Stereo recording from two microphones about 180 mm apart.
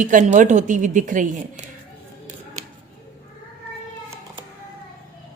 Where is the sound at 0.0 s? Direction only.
45° right (ahead or behind).